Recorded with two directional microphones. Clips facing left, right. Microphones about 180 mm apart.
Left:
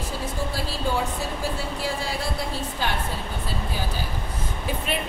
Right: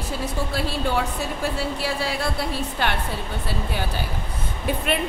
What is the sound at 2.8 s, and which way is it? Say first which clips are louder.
Speech: right 3 dB; 70° right (ahead or behind).